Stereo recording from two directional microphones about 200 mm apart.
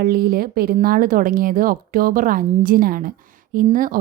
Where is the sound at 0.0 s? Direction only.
45° right (ahead or behind).